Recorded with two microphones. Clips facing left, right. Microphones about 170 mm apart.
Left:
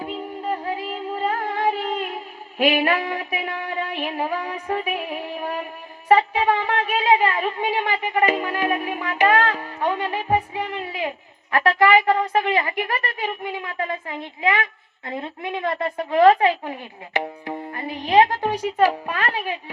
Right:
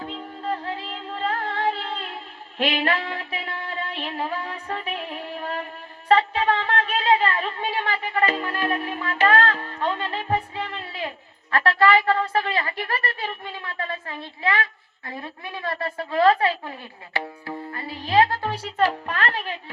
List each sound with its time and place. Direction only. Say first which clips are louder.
0.0 s music: left 3 dB; 10° left (ahead or behind)
6.1 s a sound: left 2 dB; 10° left (ahead or behind)
11.5 s a woman's voice: left 2 dB; 15° left (ahead or behind)